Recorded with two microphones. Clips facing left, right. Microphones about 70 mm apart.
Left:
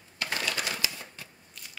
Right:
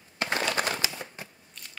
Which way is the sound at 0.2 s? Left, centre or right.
Right.